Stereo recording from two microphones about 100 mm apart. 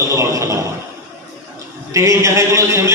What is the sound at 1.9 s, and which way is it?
A man's voice, 30° right (ahead or behind).